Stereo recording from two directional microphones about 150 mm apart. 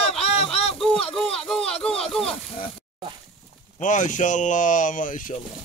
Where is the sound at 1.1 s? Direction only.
5° left (ahead or behind).